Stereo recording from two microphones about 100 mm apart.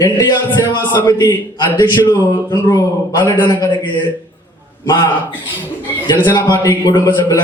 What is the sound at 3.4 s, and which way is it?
Speech, 45° left (ahead or behind).